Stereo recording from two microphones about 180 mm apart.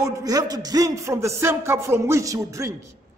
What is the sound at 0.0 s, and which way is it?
A man's voice, 20° right (ahead or behind).